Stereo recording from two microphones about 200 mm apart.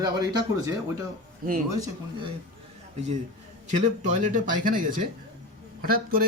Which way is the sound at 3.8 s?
40° right (ahead or behind).